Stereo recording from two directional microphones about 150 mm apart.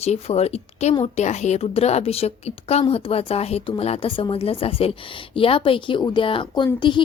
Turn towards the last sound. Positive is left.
turn(degrees=30)  # may be behind; listen again after turning